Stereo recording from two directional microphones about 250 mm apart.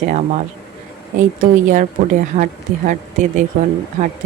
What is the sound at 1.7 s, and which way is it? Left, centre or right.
Speech, right.